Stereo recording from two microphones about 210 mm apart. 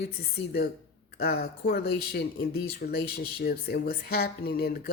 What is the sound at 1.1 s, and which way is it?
Speech, 45° left (ahead or behind).